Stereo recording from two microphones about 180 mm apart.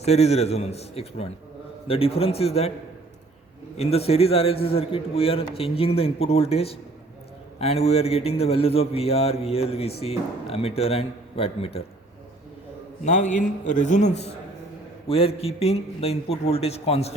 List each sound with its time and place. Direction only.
0.0 s a man's voice: 35° left (ahead or behind)
3.8 s a man's voice: 35° left (ahead or behind)
13.1 s a man's voice: 40° left (ahead or behind)